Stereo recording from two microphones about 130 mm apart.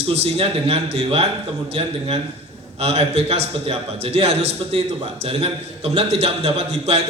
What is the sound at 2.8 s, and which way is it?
A man's voice, 55° right (ahead or behind).